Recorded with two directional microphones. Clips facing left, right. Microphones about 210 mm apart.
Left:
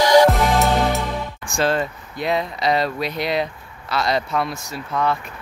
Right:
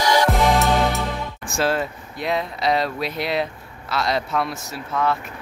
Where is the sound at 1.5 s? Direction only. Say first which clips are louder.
Left 1 dB; 5° right (ahead or behind).